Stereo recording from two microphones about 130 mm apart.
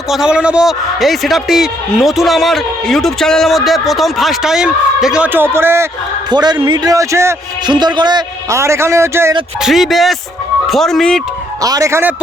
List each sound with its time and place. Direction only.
0.1 s a man's voice: 5° right (ahead or behind)
6.3 s a man's voice: 35° right (ahead or behind)
7.7 s a man's voice: 35° right (ahead or behind)
8.5 s a man's voice: 20° right (ahead or behind)
9.6 s a man's voice: centre (ahead or behind)
11.6 s a man's voice: 25° right (ahead or behind)